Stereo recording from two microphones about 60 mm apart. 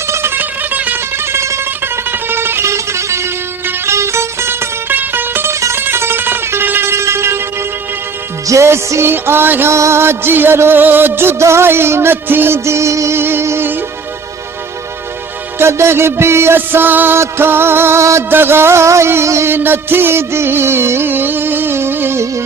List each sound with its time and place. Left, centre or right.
0.1 s music: right
0.3 s music: right
1.2 s music: right
1.8 s music: right
5.5 s music: right
5.8 s music: right
8.6 s music: right
9.7 s music: right
12.5 s music: right
15.5 s music: right
16.6 s music: right
18.0 s music: right
18.3 s music: right
19.5 s music: right